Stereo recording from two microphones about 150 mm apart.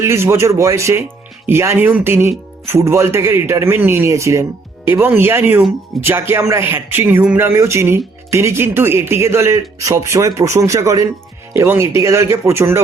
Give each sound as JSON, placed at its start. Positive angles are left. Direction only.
{"t": 0.0, "sound": "a man's voice", "side_deg": -20}